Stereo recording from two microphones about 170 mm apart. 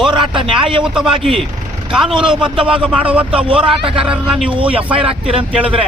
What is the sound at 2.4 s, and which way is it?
A man's voice, 5° right (ahead or behind).